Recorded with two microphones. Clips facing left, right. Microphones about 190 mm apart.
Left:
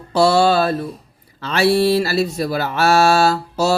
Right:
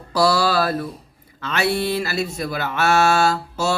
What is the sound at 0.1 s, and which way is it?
Mantra, 25° left (ahead or behind).